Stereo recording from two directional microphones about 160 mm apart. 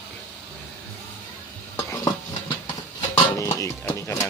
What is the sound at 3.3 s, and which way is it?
Music, 20° left (ahead or behind).